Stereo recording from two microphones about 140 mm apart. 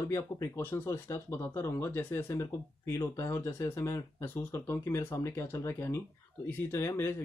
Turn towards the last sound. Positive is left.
turn(degrees=20)  # may be behind; listen again after turning